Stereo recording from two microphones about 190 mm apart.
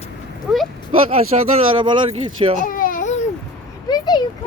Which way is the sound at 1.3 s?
35° right (ahead or behind).